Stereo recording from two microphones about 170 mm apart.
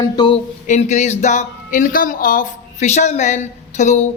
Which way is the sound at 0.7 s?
45° left (ahead or behind).